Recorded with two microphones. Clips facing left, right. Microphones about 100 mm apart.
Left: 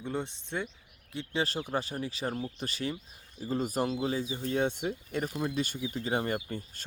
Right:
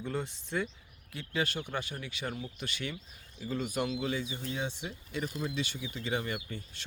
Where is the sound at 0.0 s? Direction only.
20° left (ahead or behind); by 4.5 s 35° left (ahead or behind).